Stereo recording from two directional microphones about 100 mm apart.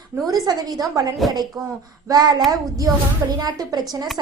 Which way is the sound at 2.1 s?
40° right (ahead or behind).